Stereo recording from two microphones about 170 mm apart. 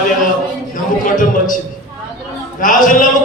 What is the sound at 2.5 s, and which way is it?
Speech, 50° left (ahead or behind).